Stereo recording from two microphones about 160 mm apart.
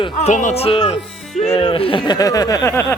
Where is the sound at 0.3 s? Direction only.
50° left (ahead or behind).